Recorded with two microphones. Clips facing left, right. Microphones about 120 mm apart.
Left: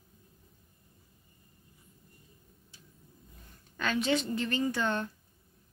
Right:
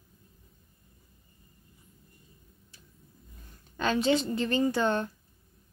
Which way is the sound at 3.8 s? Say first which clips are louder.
Right 4 dB; 30° right (ahead or behind).